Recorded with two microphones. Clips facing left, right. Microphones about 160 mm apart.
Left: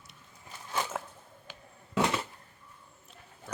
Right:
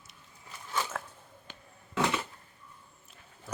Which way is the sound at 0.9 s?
15° left (ahead or behind).